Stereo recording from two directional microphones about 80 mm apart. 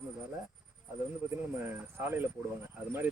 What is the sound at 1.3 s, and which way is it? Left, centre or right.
Speech, right.